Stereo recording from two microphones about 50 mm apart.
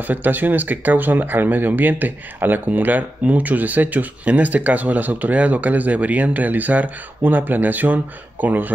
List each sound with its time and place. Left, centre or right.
0.0 s speech: right